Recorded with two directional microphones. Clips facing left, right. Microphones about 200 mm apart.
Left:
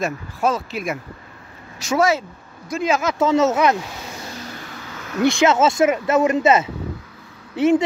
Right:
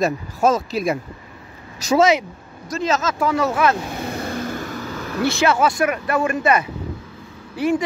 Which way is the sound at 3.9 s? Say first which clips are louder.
Right 8 dB; 55° right (ahead or behind).